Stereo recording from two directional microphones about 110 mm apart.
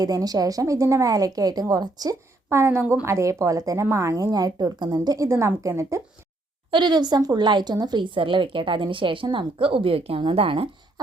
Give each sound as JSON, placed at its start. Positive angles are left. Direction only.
{"t": 0.0, "sound": "a woman's voice", "side_deg": -35}
{"t": 2.5, "sound": "a woman's voice", "side_deg": -25}
{"t": 6.7, "sound": "speech", "side_deg": -45}